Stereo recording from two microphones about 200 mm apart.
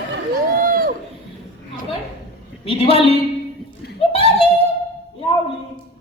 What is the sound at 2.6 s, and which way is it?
Speech, 30° left (ahead or behind).